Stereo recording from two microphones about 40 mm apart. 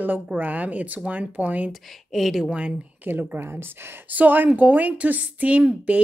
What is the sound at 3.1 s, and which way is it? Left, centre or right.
Speech, right.